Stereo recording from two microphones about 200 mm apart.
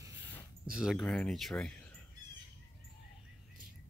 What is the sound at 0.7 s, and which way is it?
Speech, 5° right (ahead or behind).